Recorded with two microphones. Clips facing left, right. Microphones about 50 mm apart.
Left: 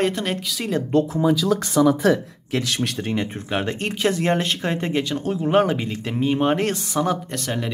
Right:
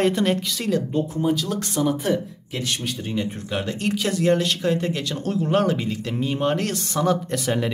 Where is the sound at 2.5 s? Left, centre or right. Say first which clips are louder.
Left 4 dB; left.